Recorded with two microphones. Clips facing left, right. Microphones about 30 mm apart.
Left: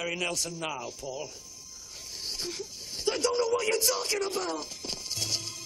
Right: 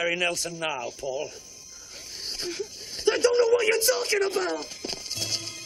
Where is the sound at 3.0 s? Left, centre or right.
Right.